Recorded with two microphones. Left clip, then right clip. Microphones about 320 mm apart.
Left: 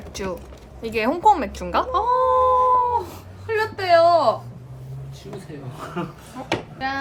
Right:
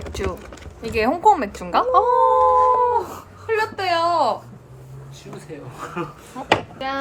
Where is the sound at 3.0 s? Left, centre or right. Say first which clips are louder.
Right 4 dB; centre.